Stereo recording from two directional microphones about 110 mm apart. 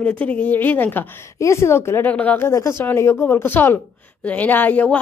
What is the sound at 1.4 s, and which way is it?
A woman's voice, 25° left (ahead or behind).